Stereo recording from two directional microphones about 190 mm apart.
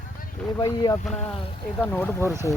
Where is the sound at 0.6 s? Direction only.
20° left (ahead or behind).